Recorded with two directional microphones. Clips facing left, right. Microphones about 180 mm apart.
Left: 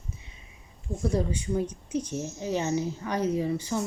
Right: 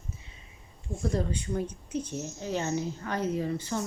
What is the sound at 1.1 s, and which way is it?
A woman's voice, 10° left (ahead or behind).